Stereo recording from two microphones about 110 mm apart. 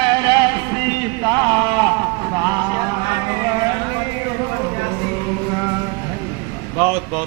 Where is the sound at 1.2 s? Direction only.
40° right (ahead or behind).